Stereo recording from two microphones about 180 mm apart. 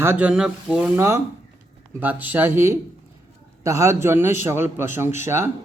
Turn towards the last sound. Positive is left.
turn(degrees=-15)  # may be behind; listen again after turning